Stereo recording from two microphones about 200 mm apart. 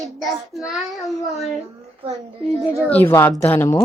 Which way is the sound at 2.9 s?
10° left (ahead or behind).